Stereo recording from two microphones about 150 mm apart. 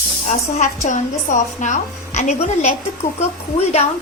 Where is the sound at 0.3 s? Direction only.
55° left (ahead or behind).